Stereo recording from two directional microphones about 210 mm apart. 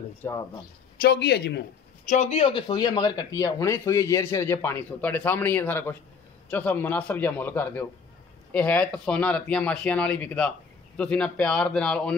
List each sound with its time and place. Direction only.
0.2 s speech: 15° left (ahead or behind)
1.0 s speech: 50° left (ahead or behind)
2.0 s a man's voice: 30° left (ahead or behind); by 12.1 s 5° left (ahead or behind)